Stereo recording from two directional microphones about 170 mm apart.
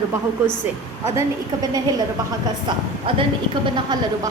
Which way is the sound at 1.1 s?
20° right (ahead or behind).